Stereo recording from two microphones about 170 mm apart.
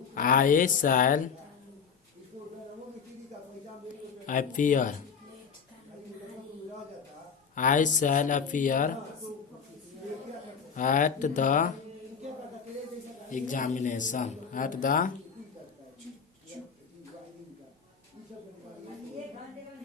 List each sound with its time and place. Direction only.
0.1 s a man's voice: 55° left (ahead or behind)
4.3 s a man's voice: 50° left (ahead or behind)
7.5 s a man's voice: 50° left (ahead or behind)
10.8 s a man's voice: 50° left (ahead or behind)
13.3 s a man's voice: 50° left (ahead or behind)